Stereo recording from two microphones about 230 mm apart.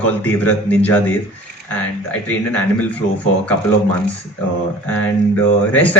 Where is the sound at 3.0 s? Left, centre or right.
Left.